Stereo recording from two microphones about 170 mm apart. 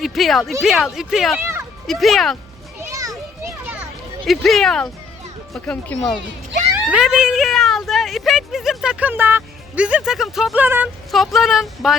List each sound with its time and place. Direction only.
0.0 s speech: centre (ahead or behind)
1.4 s a sound: 15° right (ahead or behind)
1.9 s speech: centre (ahead or behind)
2.9 s children playing: 20° right (ahead or behind)
4.3 s speech: centre (ahead or behind)